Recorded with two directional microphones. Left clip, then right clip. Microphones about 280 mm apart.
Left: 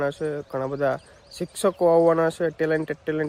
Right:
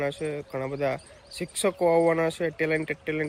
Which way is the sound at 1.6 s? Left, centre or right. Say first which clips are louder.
Left 4 dB; left.